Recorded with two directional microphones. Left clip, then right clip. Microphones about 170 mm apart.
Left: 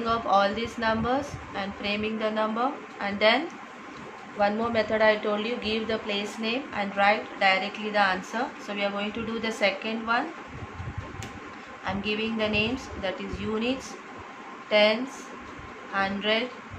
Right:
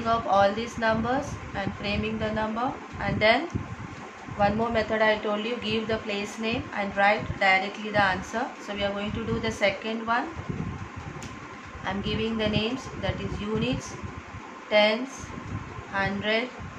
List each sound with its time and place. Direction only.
0.0 s speech: 10° left (ahead or behind)
4.4 s speech: 5° left (ahead or behind)
11.8 s speech: 10° left (ahead or behind)
14.7 s speech: 10° left (ahead or behind)